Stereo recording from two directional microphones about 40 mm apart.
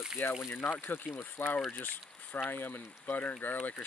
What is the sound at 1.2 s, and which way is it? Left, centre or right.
Speech, left.